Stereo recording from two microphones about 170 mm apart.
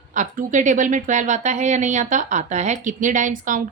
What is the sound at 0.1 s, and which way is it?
Speech, 50° right (ahead or behind).